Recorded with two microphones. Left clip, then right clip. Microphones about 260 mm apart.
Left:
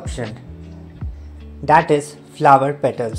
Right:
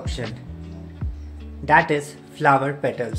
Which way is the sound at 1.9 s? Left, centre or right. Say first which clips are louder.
Left 6 dB; left.